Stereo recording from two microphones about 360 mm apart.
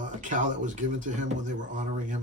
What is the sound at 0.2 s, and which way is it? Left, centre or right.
Speech, right.